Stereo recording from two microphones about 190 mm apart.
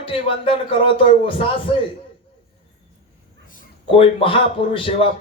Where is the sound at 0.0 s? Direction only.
30° left (ahead or behind).